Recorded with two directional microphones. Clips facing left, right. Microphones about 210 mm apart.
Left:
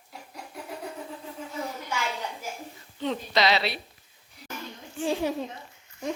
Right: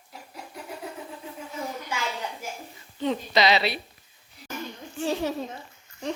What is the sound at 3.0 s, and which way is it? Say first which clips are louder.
Speech: right 2 dB; centre (ahead or behind).